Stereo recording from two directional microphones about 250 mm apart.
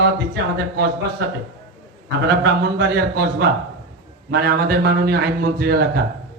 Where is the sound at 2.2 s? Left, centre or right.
Right.